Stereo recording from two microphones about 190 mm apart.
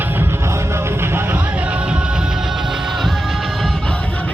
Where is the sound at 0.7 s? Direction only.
10° right (ahead or behind).